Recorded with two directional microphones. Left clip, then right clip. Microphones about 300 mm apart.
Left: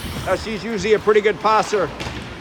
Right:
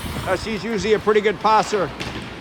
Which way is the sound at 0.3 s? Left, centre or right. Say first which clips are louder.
Left 1 dB; centre.